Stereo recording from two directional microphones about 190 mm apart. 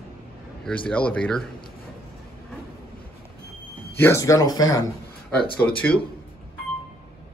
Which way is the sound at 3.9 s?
15° left (ahead or behind).